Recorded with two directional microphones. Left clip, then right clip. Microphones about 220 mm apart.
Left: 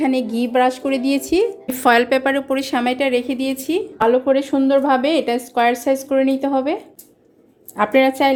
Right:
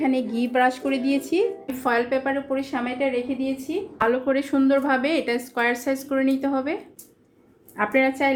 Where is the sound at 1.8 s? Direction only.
40° left (ahead or behind).